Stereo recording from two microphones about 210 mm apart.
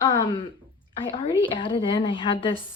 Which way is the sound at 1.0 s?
25° left (ahead or behind).